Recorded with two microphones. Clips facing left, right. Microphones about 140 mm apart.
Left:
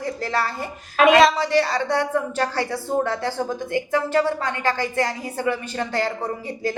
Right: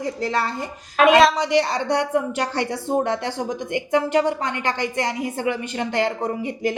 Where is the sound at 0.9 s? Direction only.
Centre (ahead or behind).